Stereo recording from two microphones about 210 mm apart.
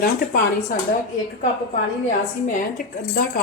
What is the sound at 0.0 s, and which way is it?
Speech, 45° left (ahead or behind).